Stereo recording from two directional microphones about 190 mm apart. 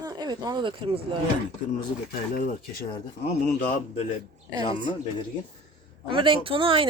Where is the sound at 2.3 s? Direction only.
50° left (ahead or behind).